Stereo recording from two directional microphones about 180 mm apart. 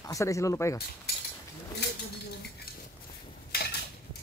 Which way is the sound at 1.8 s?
65° left (ahead or behind).